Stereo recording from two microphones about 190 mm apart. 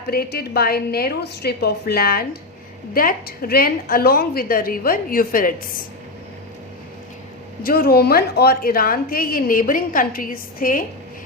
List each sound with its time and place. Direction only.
0.1 s a woman's voice: 55° left (ahead or behind)
7.6 s a woman's voice: 50° left (ahead or behind)